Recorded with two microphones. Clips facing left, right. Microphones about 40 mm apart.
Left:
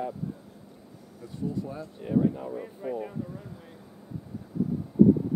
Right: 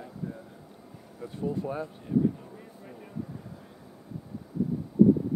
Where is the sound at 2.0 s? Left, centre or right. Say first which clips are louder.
Left 3 dB; left.